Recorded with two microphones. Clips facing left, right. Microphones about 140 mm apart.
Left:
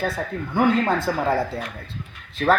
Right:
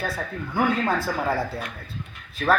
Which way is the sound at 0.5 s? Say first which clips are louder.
Left 3 dB; 20° left (ahead or behind).